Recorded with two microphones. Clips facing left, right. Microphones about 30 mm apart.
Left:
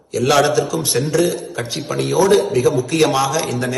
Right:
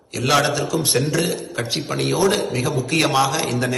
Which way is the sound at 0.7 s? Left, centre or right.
Right.